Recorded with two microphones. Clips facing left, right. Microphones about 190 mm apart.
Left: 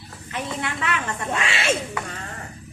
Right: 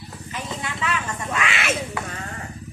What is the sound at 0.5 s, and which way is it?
Speech, 65° left (ahead or behind).